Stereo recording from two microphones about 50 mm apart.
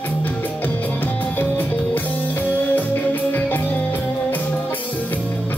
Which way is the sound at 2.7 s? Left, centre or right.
Left.